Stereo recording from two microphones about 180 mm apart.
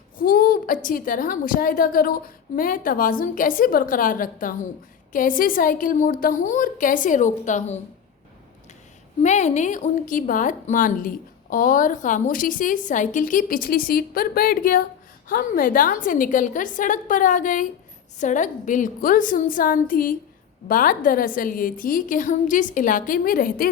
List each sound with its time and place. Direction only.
0.2 s a woman's voice: 50° left (ahead or behind)
9.2 s a woman's voice: 40° left (ahead or behind)